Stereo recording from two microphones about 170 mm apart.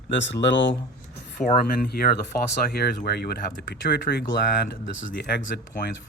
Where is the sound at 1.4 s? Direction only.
55° left (ahead or behind); by 5.5 s 85° left.